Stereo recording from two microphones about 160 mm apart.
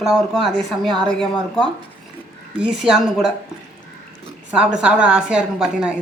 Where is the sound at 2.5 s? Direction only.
5° right (ahead or behind).